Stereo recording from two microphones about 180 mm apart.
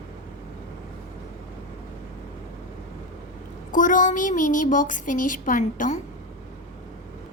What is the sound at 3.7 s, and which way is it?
A woman's voice, 50° left (ahead or behind).